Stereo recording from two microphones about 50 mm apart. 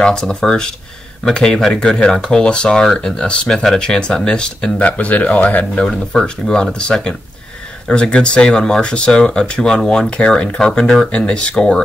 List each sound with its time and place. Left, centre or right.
0.0 s speech: centre
4.7 s speech: left
5.8 s speech: centre